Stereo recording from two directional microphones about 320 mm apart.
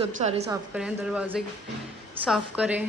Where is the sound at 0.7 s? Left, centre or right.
Centre.